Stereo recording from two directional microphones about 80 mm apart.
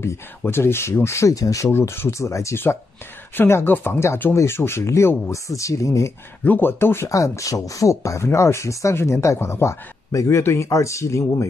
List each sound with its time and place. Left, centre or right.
0.5 s speech: left
1.7 s speech: left
6.4 s speech: left
7.1 s speech: left